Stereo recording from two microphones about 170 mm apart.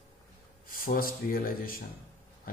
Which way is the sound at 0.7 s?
55° left (ahead or behind).